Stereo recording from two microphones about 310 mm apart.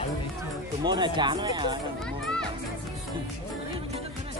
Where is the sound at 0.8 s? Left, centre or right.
Centre.